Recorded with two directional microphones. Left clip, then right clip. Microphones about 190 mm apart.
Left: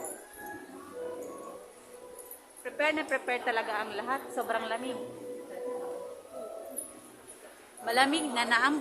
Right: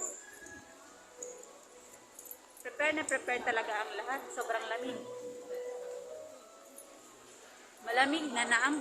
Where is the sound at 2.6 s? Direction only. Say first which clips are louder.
Left 3 dB; 10° left (ahead or behind).